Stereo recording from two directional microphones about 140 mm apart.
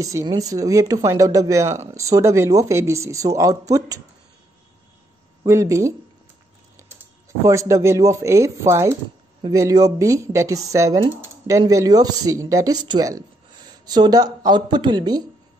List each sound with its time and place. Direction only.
0.0 s speech: 25° right (ahead or behind)
5.4 s speech: 25° right (ahead or behind)
7.4 s speech: 20° right (ahead or behind)